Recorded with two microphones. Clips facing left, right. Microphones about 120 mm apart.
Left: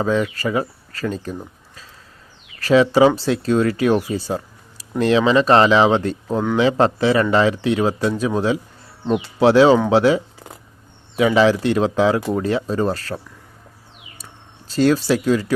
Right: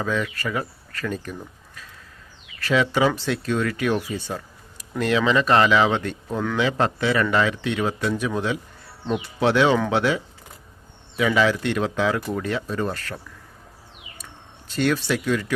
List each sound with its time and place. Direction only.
0.0 s speech: 30° left (ahead or behind)
11.2 s speech: 30° left (ahead or behind)
14.7 s speech: 35° left (ahead or behind)